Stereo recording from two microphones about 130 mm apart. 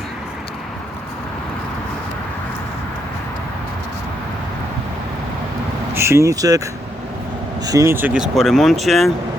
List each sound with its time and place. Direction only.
5.9 s speech: 20° right (ahead or behind)
7.7 s speech: 20° right (ahead or behind); by 9.1 s centre (ahead or behind)